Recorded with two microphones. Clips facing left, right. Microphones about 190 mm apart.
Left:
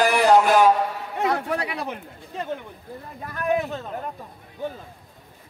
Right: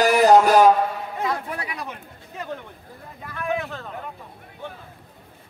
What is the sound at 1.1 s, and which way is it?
Speech, 65° left (ahead or behind).